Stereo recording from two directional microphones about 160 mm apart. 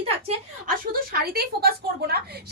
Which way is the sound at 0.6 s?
70° right (ahead or behind).